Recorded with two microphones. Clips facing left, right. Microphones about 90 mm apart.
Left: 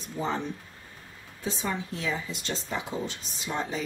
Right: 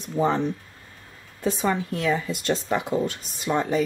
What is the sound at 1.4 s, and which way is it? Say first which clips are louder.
Speech: right 8 dB; 60° right (ahead or behind).